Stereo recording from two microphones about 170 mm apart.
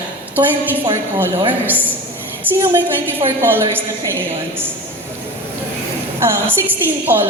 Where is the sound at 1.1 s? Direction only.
15° right (ahead or behind).